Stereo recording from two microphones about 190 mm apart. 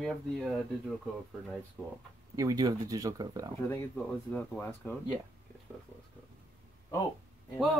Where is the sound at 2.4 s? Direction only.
20° right (ahead or behind).